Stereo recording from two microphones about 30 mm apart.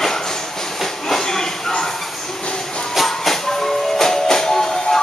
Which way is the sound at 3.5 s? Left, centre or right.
Centre.